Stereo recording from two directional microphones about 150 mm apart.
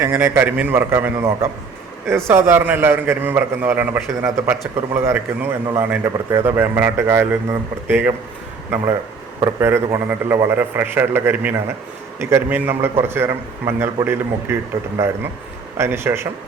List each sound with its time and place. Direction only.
0.0 s a man's voice: 15° right (ahead or behind)